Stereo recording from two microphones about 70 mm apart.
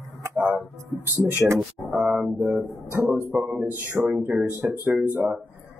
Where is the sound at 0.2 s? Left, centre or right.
Right.